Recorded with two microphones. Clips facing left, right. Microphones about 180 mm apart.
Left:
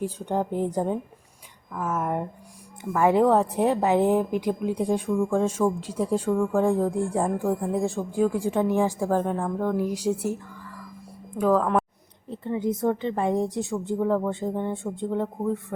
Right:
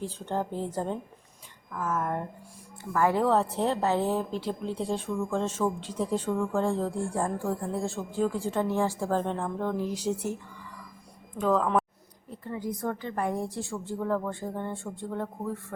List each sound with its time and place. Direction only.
0.0 s a woman's voice: 15° left (ahead or behind)
11.3 s a woman's voice: 10° left (ahead or behind)
12.3 s a woman's voice: 20° left (ahead or behind)